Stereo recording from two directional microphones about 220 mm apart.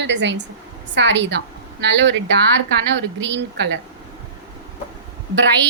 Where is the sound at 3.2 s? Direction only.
55° right (ahead or behind).